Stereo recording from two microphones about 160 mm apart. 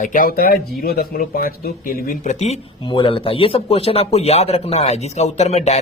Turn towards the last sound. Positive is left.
turn(degrees=45)  # may be behind; listen again after turning